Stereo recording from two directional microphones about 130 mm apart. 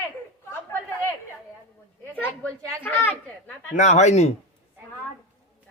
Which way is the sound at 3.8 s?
65° left (ahead or behind).